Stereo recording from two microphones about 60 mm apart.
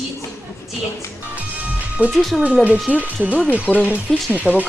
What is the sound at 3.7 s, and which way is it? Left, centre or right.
Speech, centre.